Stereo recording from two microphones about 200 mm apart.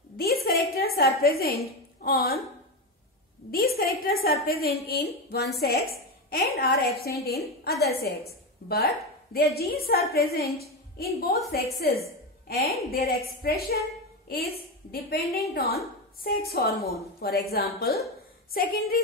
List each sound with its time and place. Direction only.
0.2 s a woman's voice: 50° left (ahead or behind)
3.5 s a woman's voice: 50° left (ahead or behind)
8.3 s a woman's voice: 50° left (ahead or behind)